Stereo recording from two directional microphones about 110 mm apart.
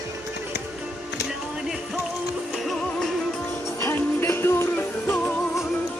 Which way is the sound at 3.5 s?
25° left (ahead or behind).